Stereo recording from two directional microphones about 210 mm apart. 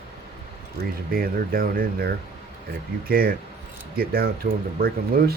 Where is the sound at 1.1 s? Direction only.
45° right (ahead or behind).